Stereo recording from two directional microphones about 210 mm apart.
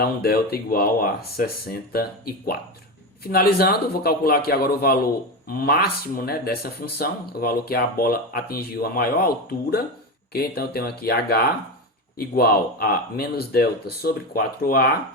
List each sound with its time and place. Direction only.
0.0 s speech: 45° left (ahead or behind)